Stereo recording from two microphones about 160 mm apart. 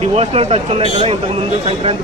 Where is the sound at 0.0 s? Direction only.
40° right (ahead or behind).